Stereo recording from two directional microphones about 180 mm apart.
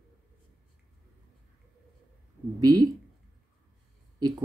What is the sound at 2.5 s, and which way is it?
Speech, 20° right (ahead or behind).